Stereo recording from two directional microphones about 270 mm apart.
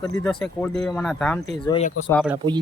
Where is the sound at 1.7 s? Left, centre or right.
Left.